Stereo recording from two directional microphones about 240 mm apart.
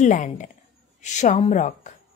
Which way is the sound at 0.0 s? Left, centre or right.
Left.